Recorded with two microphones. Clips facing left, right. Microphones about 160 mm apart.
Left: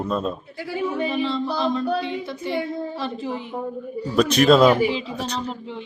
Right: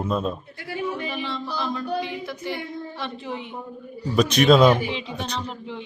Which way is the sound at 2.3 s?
30° left (ahead or behind).